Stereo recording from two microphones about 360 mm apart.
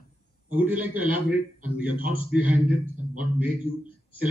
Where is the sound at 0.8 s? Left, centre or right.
Centre.